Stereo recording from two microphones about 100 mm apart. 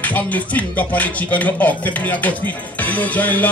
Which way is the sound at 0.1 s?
15° left (ahead or behind).